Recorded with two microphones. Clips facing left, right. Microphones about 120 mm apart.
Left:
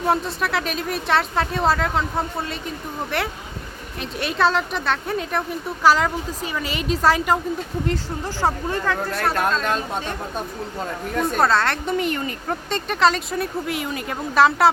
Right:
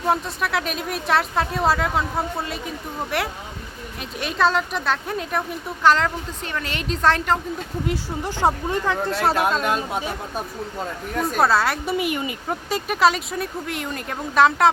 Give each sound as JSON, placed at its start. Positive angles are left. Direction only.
{"t": 0.0, "sound": "speech", "side_deg": 0}
{"t": 7.9, "sound": "speech", "side_deg": -15}
{"t": 9.0, "sound": "speech", "side_deg": 0}